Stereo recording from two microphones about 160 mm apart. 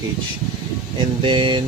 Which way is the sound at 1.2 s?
30° right (ahead or behind).